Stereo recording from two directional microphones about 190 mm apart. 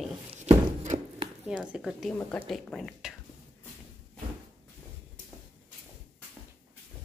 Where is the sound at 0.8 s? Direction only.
40° right (ahead or behind).